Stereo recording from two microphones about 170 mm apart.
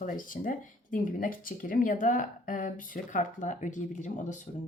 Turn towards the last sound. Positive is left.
turn(degrees=50)  # may be behind; listen again after turning